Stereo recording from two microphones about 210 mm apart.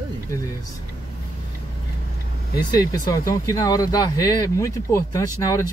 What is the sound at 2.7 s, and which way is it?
Speech, 20° left (ahead or behind).